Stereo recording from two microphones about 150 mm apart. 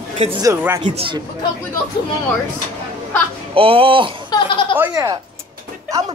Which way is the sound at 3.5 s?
40° right (ahead or behind).